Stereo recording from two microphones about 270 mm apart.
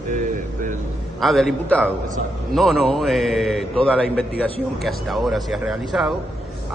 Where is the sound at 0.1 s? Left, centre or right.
Right.